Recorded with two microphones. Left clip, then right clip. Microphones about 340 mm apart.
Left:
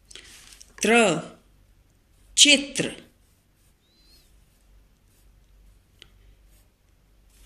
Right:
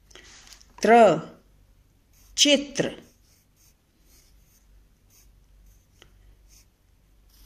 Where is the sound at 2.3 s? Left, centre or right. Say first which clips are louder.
Left 3 dB; right.